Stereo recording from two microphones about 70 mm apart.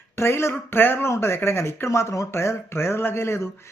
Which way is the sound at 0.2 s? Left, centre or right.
Left.